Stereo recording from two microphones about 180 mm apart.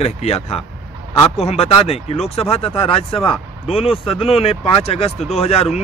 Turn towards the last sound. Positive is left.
turn(degrees=35)  # may be behind; listen again after turning